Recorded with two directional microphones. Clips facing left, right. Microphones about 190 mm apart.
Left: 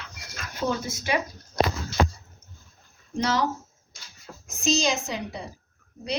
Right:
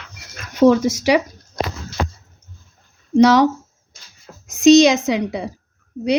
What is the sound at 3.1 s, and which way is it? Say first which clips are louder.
Speech: right 13 dB; 80° right.